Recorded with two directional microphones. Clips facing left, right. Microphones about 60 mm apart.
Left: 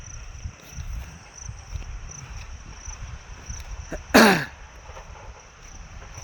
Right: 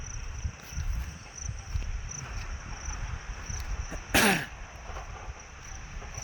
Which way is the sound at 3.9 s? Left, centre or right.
Left.